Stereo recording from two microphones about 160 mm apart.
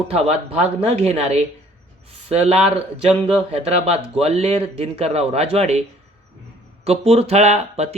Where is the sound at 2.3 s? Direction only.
40° right (ahead or behind).